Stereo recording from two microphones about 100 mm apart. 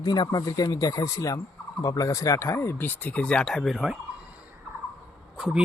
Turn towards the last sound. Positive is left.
turn(degrees=-5)  # may be behind; listen again after turning